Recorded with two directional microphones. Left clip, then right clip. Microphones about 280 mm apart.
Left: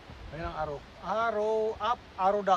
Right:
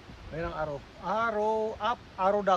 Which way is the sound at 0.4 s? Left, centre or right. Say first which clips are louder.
Right 1 dB; centre.